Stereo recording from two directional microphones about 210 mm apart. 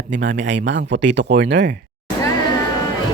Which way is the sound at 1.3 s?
50° right (ahead or behind).